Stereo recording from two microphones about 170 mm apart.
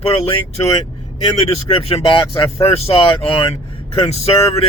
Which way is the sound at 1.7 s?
30° left (ahead or behind).